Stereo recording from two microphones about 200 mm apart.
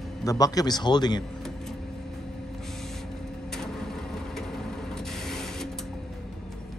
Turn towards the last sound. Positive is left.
turn(degrees=0)  # may be behind; listen again after turning